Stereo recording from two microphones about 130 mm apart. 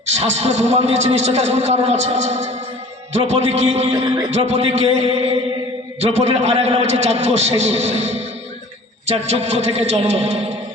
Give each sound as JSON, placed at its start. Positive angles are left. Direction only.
{"t": 0.0, "sound": "a man's voice", "side_deg": -55}
{"t": 3.9, "sound": "a man's voice", "side_deg": -35}
{"t": 4.3, "sound": "a man's voice", "side_deg": -55}